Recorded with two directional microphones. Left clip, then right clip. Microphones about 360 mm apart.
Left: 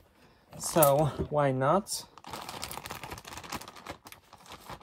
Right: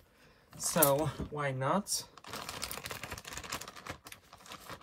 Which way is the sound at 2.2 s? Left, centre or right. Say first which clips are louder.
Left 2 dB; left.